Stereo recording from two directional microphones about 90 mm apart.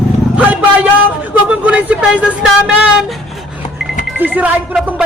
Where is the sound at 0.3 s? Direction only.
15° right (ahead or behind).